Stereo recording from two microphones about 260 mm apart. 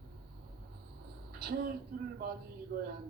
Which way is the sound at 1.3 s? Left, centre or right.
Right.